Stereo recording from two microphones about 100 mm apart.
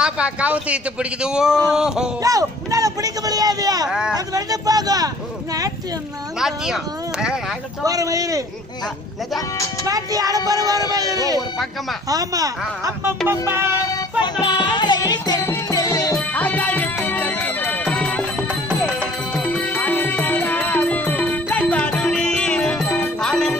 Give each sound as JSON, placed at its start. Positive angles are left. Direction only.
{"t": 0.0, "sound": "a man's voice", "side_deg": -10}
{"t": 2.2, "sound": "a man's voice", "side_deg": -35}
{"t": 6.4, "sound": "a man's voice", "side_deg": -5}
{"t": 7.8, "sound": "a man's voice", "side_deg": -35}
{"t": 9.8, "sound": "a man's voice", "side_deg": -35}
{"t": 13.3, "sound": "music", "side_deg": -25}
{"t": 14.4, "sound": "music", "side_deg": 50}
{"t": 16.2, "sound": "music", "side_deg": 15}
{"t": 19.3, "sound": "music", "side_deg": 15}